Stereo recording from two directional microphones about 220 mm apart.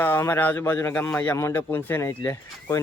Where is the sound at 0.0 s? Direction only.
10° left (ahead or behind).